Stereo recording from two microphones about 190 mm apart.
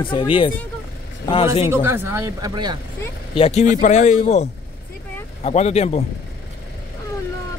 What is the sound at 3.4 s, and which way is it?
Speech, 35° left (ahead or behind).